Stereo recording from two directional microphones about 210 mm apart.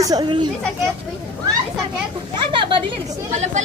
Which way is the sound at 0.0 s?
20° right (ahead or behind).